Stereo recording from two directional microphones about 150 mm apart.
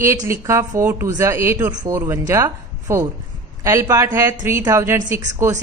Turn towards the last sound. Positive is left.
turn(degrees=-20)  # may be behind; listen again after turning